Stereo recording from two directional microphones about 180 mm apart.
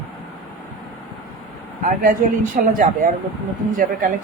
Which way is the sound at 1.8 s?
45° right (ahead or behind).